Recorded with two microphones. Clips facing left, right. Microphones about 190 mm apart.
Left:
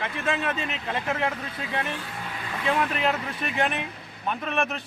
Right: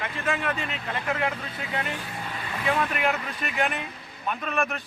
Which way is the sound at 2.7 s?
25° left (ahead or behind).